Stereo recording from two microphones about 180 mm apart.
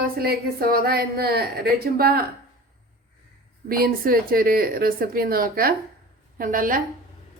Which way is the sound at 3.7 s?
55° right (ahead or behind).